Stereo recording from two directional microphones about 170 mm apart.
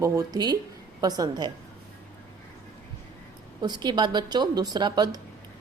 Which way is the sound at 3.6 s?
25° right (ahead or behind).